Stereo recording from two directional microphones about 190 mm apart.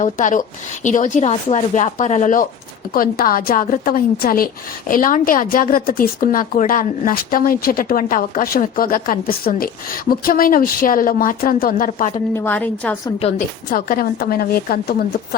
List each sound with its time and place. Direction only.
0.0 s a woman's voice: 40° left (ahead or behind)
12.1 s a woman's voice: 10° left (ahead or behind)
13.2 s speech: 30° left (ahead or behind)
13.7 s a woman's voice: 50° left (ahead or behind)